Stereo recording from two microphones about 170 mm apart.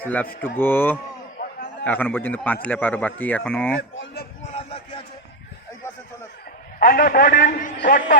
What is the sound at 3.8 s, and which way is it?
Speech, 85° left.